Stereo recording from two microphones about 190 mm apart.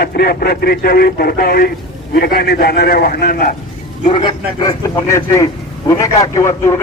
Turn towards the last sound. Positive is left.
turn(degrees=15)  # may be behind; listen again after turning